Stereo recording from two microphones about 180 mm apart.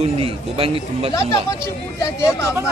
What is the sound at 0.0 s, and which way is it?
Speech, 30° right (ahead or behind).